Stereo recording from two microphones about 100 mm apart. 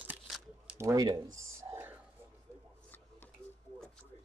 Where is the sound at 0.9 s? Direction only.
40° right (ahead or behind).